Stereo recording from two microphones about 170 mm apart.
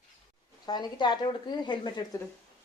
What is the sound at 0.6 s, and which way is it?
A woman's voice, 25° left (ahead or behind).